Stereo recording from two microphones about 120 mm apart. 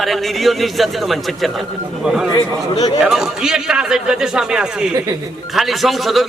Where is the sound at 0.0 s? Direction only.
Centre (ahead or behind).